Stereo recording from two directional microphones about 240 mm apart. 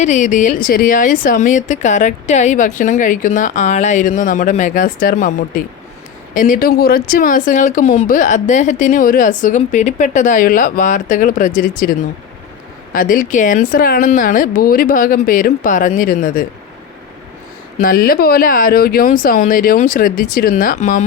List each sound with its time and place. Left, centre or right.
0.0 s speech: left
17.7 s speech: left